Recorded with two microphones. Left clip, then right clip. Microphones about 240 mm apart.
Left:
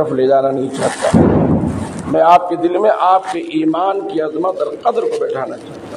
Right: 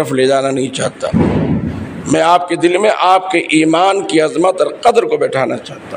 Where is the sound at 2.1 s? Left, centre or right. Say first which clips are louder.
Left 1 dB; right.